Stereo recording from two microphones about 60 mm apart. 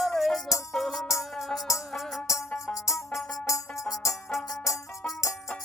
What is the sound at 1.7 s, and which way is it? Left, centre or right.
Music, left.